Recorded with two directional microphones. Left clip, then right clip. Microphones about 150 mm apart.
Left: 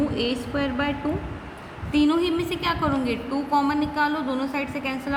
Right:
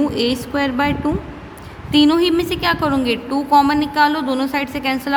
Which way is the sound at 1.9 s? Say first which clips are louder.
Right 8 dB; 65° right (ahead or behind).